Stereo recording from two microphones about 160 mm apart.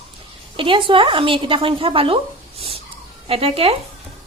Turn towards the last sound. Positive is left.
turn(degrees=-35)  # may be behind; listen again after turning